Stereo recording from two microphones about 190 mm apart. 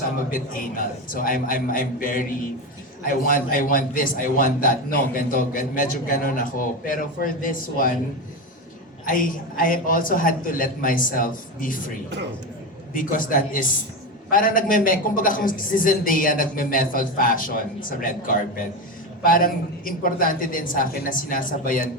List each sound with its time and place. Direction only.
0.3 s a man's voice: 45° left (ahead or behind)
9.0 s a man's voice: 45° left (ahead or behind)
12.9 s a man's voice: 45° left (ahead or behind)